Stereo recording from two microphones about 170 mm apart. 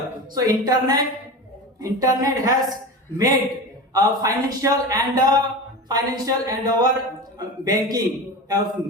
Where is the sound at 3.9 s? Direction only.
20° right (ahead or behind).